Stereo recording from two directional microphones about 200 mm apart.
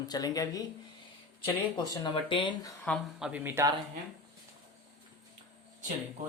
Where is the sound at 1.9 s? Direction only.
20° left (ahead or behind).